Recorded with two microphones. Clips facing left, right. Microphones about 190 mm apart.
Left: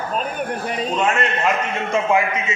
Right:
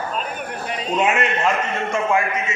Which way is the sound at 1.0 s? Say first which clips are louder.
Right 2 dB; 10° right (ahead or behind).